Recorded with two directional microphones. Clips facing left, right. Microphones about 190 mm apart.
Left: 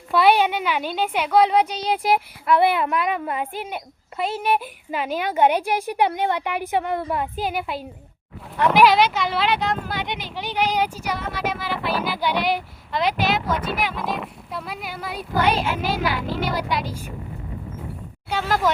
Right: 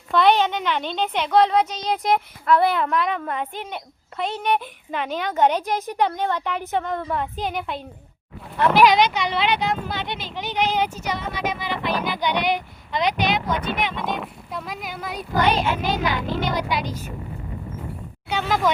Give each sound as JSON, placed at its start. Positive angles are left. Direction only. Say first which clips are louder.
{"t": 0.1, "sound": "a woman's voice", "louder": "left 1 dB", "side_deg": 10}
{"t": 9.9, "sound": "speech", "louder": "left 1 dB", "side_deg": 15}
{"t": 18.3, "sound": "speech", "louder": "even", "side_deg": 5}